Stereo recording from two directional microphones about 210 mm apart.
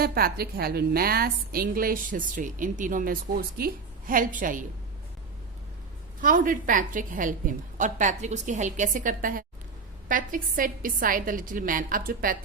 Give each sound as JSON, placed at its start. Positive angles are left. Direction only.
{"t": 0.0, "sound": "a woman's voice", "side_deg": -45}
{"t": 6.2, "sound": "a woman's voice", "side_deg": -40}